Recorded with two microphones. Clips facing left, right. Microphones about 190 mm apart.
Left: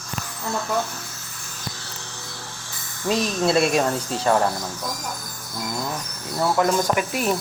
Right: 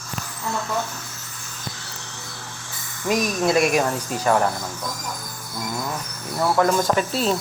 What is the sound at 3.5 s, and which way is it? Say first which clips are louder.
Speech: even; 25° left (ahead or behind).